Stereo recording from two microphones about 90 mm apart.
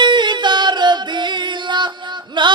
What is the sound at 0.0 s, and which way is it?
Music, 60° right (ahead or behind).